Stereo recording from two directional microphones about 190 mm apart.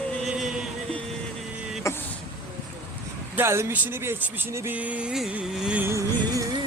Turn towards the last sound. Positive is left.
turn(degrees=-15)  # may be behind; listen again after turning